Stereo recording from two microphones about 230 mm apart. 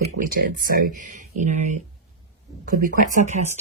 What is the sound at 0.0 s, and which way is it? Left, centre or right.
Speech, right.